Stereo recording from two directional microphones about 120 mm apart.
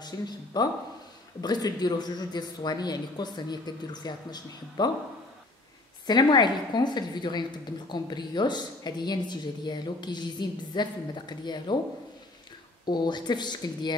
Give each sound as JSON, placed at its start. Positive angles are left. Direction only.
{"t": 0.0, "sound": "a woman's voice", "side_deg": 35}
{"t": 6.0, "sound": "a woman's voice", "side_deg": 35}
{"t": 12.8, "sound": "a woman's voice", "side_deg": 40}